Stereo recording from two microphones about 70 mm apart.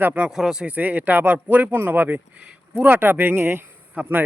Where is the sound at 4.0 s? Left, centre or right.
Centre.